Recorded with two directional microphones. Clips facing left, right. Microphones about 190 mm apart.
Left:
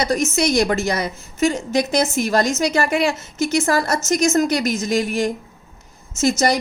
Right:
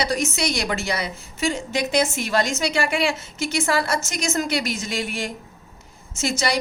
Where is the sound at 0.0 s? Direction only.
45° left (ahead or behind).